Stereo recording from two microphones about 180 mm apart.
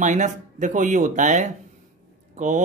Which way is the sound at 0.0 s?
45° right (ahead or behind).